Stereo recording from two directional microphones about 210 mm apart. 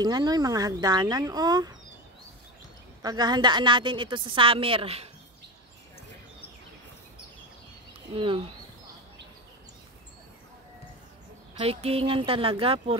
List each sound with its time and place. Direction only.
0.0 s speech: 20° right (ahead or behind)
3.0 s a woman's voice: 20° right (ahead or behind)
11.5 s a woman's voice: 30° right (ahead or behind)